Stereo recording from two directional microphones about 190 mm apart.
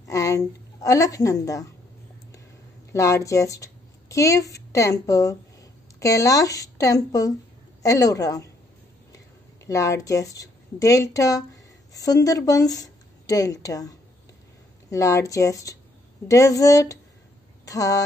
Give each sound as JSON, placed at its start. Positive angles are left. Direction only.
{"t": 0.1, "sound": "a woman's voice", "side_deg": 15}
{"t": 2.9, "sound": "a woman's voice", "side_deg": 15}
{"t": 9.7, "sound": "a woman's voice", "side_deg": 15}